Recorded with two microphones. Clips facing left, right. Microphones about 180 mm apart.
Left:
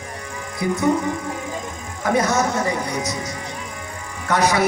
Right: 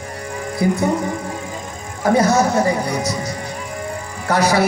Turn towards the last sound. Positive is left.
turn(degrees=-30)  # may be behind; listen again after turning